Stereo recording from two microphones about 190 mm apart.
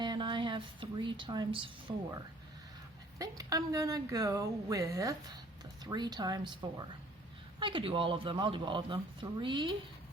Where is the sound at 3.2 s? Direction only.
20° right (ahead or behind).